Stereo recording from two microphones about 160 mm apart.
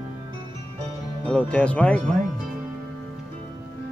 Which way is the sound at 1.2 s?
10° left (ahead or behind).